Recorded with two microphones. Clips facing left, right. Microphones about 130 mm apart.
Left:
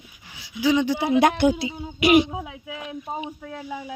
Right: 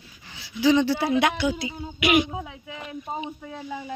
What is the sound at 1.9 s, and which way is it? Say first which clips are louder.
Speech: left 4 dB; 35° left (ahead or behind).